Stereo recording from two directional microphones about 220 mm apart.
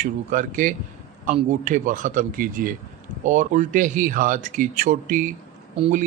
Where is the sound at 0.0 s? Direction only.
35° right (ahead or behind).